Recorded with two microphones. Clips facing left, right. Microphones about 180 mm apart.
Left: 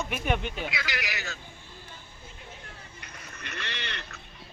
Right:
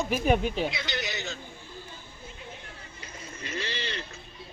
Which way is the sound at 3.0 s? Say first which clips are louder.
Right 6 dB; 65° left (ahead or behind).